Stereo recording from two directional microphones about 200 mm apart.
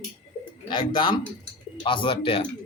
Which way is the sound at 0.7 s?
25° left (ahead or behind).